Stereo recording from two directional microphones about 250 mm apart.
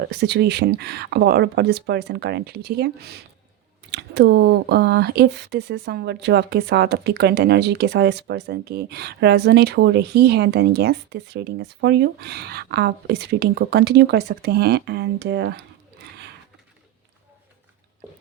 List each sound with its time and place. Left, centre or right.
0.1 s speech: right